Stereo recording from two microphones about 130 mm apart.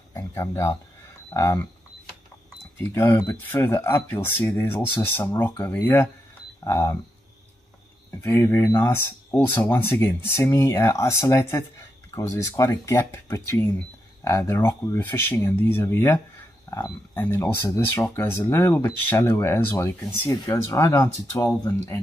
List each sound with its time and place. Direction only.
0.1 s speech: 20° left (ahead or behind)
2.8 s speech: 20° left (ahead or behind)
8.2 s speech: 15° left (ahead or behind)